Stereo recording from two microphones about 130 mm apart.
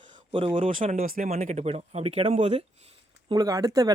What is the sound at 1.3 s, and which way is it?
Speech, 60° right (ahead or behind).